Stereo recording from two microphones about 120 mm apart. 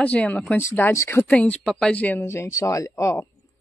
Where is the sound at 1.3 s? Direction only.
10° left (ahead or behind).